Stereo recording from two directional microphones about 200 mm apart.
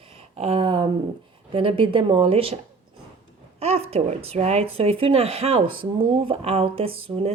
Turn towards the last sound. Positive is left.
turn(degrees=-30)  # may be behind; listen again after turning